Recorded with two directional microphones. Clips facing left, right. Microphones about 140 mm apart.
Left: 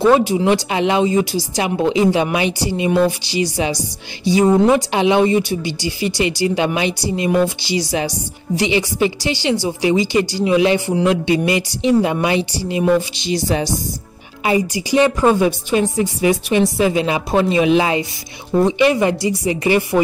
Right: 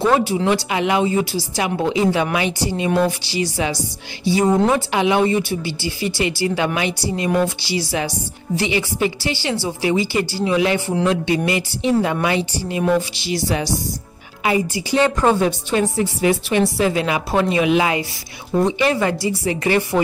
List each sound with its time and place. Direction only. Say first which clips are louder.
0.2 s a woman's voice: left 3 dB; 15° left (ahead or behind)
3.3 s a woman's voice: left 2 dB; 20° left (ahead or behind)